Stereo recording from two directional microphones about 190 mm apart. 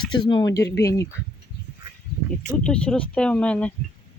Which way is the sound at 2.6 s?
5° left (ahead or behind).